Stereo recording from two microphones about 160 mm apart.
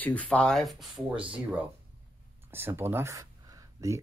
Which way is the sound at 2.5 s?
15° right (ahead or behind).